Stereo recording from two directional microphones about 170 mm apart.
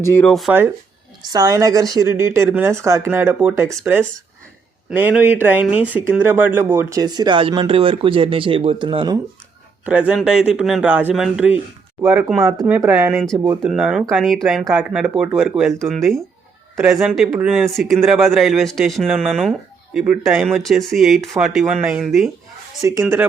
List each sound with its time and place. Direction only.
0.0 s speech: 15° left (ahead or behind)
0.3 s speech: centre (ahead or behind)
1.3 s speech: 20° right (ahead or behind)
9.8 s speech: 10° right (ahead or behind)
12.4 s speech: 15° right (ahead or behind)
13.7 s speech: 5° right (ahead or behind)
22.8 s speech: 20° right (ahead or behind)